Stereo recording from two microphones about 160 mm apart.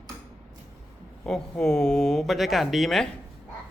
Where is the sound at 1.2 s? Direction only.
5° left (ahead or behind).